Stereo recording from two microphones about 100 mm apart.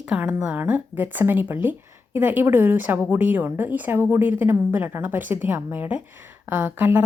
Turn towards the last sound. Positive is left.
turn(degrees=-20)  # may be behind; listen again after turning